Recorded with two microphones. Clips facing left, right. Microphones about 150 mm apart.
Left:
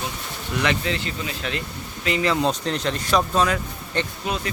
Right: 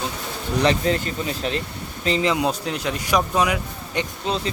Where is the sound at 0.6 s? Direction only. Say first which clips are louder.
Right 5 dB; 40° right (ahead or behind).